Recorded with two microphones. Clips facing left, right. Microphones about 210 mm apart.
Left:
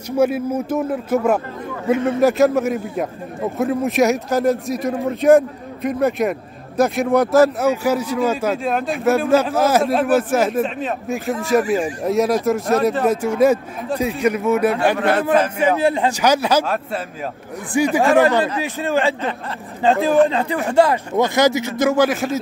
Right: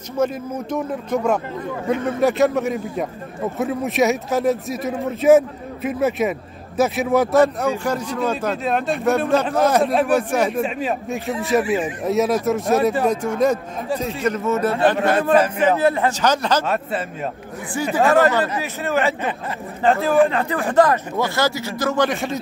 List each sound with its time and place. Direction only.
0.2 s a man's voice: 5° left (ahead or behind)
16.6 s speech: centre (ahead or behind)
17.9 s a man's voice: 15° left (ahead or behind)
21.9 s speech: 5° left (ahead or behind)